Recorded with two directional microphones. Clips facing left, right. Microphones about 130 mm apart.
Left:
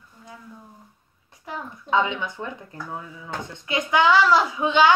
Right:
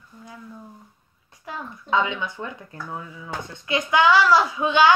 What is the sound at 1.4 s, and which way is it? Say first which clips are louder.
Child singing: even; 20° left (ahead or behind).